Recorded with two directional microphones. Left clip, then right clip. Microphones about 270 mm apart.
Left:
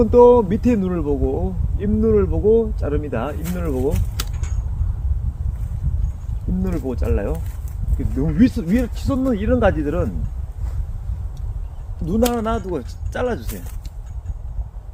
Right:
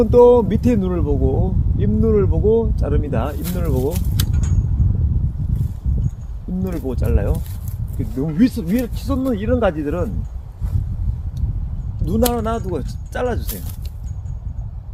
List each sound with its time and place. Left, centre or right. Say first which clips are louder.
0.0 s speech: even; right
6.6 s speech: even; right
12.0 s speech: even; centre